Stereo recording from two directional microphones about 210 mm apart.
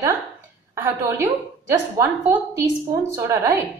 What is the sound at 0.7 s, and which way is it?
A woman's voice, 10° right (ahead or behind).